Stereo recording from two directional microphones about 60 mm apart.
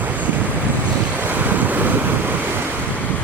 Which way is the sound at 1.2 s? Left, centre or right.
Right.